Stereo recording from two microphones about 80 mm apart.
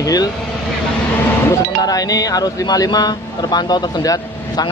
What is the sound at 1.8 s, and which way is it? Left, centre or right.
Speech, left.